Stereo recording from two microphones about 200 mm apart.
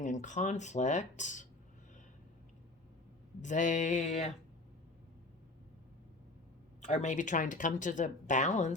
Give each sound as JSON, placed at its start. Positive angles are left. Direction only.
{"t": 0.0, "sound": "speech", "side_deg": 40}
{"t": 3.4, "sound": "speech", "side_deg": 40}
{"t": 6.8, "sound": "speech", "side_deg": 35}